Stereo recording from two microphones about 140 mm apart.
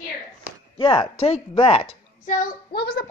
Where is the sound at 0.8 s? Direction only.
40° left (ahead or behind).